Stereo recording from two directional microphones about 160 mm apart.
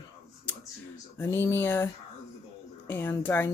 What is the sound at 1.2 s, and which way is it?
Speech, 15° left (ahead or behind).